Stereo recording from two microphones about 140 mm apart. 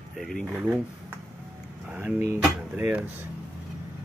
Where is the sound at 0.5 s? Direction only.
10° right (ahead or behind).